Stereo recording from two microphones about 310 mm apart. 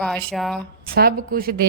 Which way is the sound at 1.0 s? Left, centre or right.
Right.